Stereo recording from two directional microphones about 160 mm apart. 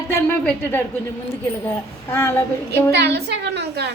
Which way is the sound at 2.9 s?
90° right.